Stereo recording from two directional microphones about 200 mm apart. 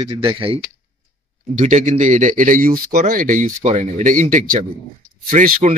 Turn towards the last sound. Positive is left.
turn(degrees=-40)  # may be behind; listen again after turning